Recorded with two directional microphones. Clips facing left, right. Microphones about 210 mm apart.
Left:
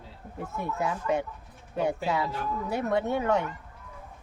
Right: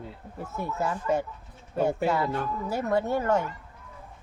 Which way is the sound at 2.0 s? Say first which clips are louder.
Right 3 dB; centre (ahead or behind).